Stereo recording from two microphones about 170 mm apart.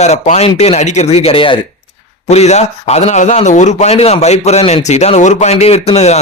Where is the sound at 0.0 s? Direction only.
40° left (ahead or behind).